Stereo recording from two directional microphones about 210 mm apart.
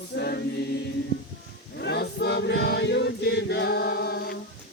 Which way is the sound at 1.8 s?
50° left (ahead or behind).